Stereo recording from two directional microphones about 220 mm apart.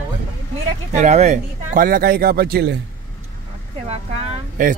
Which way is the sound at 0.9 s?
30° right (ahead or behind).